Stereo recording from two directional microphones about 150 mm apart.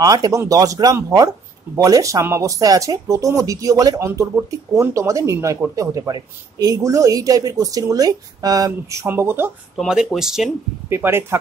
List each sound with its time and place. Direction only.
0.0 s speech: 25° right (ahead or behind)
9.8 s speech: 5° right (ahead or behind)
10.9 s speech: 15° right (ahead or behind)